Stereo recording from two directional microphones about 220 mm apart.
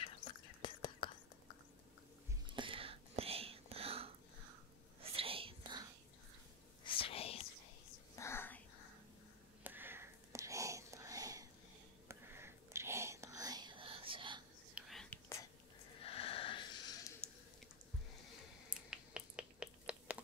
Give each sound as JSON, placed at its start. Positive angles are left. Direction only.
{"t": 0.0, "sound": "whispering", "side_deg": 20}
{"t": 2.4, "sound": "whispering", "side_deg": -20}
{"t": 6.8, "sound": "whispering", "side_deg": 25}
{"t": 8.2, "sound": "a sound", "side_deg": 10}
{"t": 9.6, "sound": "whispering", "side_deg": -10}
{"t": 14.7, "sound": "whispering", "side_deg": 0}
{"t": 16.0, "sound": "wheeze", "side_deg": 25}
{"t": 18.7, "sound": "finger snapping", "side_deg": -5}